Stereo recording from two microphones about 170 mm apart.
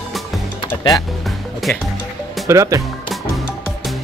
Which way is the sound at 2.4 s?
20° right (ahead or behind).